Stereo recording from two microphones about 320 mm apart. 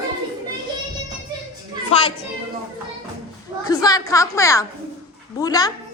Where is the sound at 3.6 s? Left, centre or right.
Centre.